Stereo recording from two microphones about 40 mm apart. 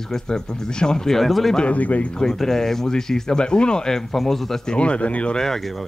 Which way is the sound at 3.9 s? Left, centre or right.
Centre.